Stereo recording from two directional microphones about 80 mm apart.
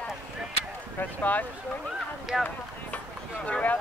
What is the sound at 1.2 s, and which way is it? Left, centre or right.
Speech, left.